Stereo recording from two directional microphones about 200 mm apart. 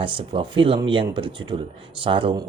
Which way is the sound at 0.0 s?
25° right (ahead or behind).